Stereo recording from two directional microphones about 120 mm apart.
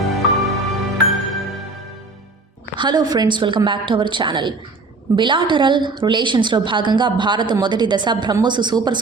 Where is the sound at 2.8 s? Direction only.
35° right (ahead or behind).